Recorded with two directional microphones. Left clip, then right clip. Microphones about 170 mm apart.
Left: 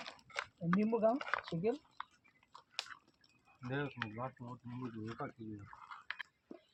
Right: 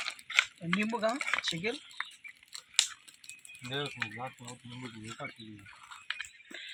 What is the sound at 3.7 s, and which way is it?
Speech, 50° right (ahead or behind).